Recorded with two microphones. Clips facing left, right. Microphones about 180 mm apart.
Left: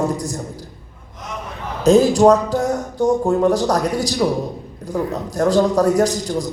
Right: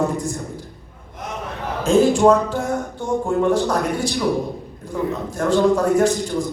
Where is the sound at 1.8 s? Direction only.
40° left (ahead or behind).